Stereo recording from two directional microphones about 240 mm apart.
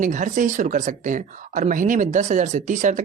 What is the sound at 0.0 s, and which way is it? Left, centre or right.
Speech, right.